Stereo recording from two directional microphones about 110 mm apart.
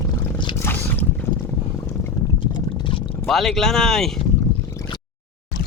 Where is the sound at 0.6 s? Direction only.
20° left (ahead or behind).